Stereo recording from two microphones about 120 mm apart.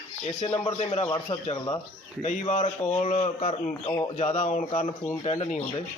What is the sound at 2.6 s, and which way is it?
Speech, 55° left (ahead or behind).